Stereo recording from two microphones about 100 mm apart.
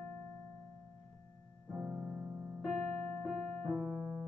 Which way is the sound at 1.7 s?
15° right (ahead or behind).